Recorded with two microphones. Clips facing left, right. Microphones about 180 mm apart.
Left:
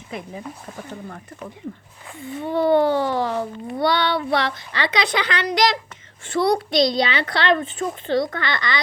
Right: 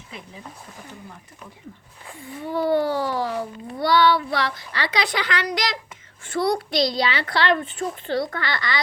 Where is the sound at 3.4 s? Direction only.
25° left (ahead or behind).